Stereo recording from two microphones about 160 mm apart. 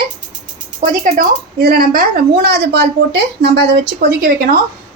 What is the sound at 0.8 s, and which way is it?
A woman's voice, 60° right (ahead or behind).